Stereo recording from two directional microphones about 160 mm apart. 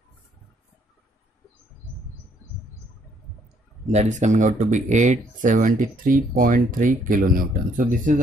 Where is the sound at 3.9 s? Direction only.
45° right (ahead or behind).